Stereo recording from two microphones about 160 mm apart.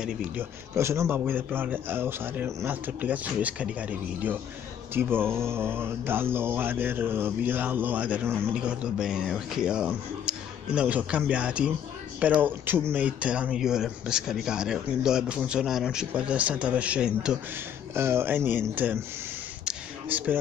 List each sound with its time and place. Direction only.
0.0 s speech: 15° right (ahead or behind)
17.9 s speech: 15° right (ahead or behind)
19.6 s a sound: 10° right (ahead or behind)